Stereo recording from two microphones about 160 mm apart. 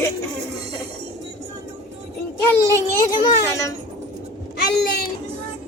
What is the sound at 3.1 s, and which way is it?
Speech, 25° left (ahead or behind).